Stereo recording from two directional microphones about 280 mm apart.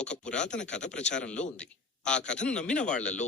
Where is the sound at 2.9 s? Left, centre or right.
Left.